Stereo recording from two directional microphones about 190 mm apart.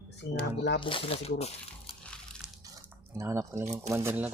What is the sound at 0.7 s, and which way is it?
Speech, 25° left (ahead or behind).